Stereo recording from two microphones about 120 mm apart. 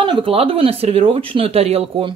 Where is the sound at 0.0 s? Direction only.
45° right (ahead or behind).